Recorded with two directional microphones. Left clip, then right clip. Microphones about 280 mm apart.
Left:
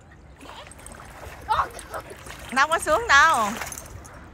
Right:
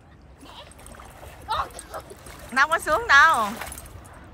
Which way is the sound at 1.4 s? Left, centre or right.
Centre.